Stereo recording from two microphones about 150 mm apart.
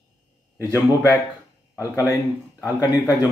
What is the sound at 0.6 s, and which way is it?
Speech, 15° left (ahead or behind).